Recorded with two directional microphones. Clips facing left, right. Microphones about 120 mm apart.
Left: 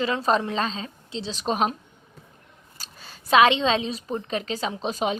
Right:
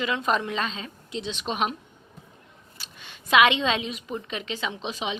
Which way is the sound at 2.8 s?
35° left (ahead or behind).